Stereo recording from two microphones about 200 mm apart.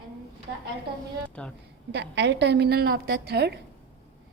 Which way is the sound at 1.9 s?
60° right (ahead or behind).